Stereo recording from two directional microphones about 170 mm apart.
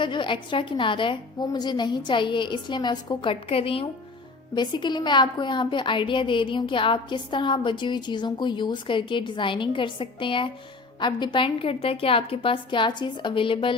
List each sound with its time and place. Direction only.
0.0 s a woman's voice: 30° left (ahead or behind)